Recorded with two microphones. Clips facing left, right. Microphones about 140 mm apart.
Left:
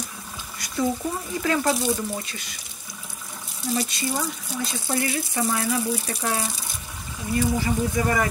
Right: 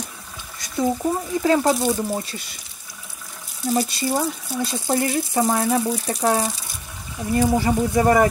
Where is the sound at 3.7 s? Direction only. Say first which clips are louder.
Right 5 dB; 35° right (ahead or behind).